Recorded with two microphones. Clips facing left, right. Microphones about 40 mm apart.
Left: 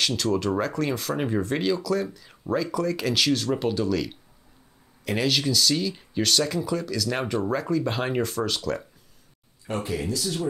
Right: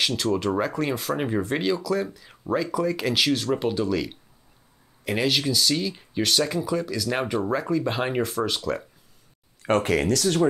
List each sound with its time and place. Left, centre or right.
0.0 s speech: centre
9.6 s speech: right